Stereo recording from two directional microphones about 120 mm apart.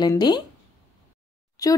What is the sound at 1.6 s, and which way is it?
Speech, 30° left (ahead or behind).